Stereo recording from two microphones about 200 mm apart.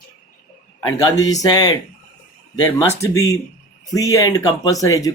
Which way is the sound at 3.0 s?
15° left (ahead or behind).